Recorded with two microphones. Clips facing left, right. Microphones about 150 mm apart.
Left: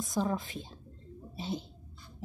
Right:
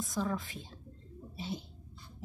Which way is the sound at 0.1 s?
30° left (ahead or behind).